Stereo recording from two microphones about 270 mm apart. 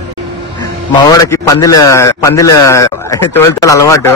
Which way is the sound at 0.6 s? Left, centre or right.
Centre.